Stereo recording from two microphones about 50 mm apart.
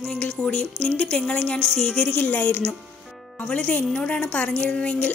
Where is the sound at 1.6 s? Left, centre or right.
Centre.